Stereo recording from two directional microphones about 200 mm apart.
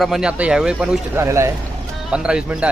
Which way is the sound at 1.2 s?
15° right (ahead or behind).